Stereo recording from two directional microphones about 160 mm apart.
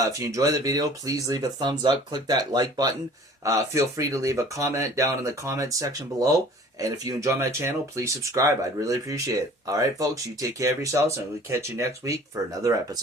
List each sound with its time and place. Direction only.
0.0 s speech: 20° right (ahead or behind)